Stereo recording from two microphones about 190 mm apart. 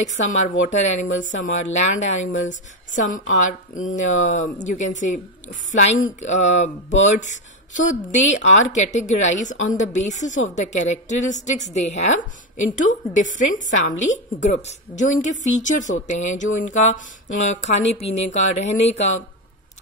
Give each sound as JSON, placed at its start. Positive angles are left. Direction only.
{"t": 0.0, "sound": "a woman's voice", "side_deg": 40}